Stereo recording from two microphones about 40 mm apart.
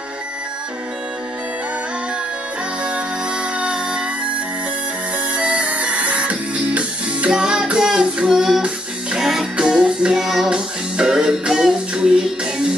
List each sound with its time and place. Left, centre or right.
3.5 s music: right
5.3 s music: right
7.2 s music: right
7.6 s child singing: right
8.3 s child singing: centre
9.2 s music: centre
9.6 s music: centre